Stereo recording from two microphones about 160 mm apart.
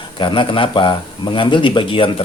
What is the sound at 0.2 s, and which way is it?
Speech, 30° left (ahead or behind).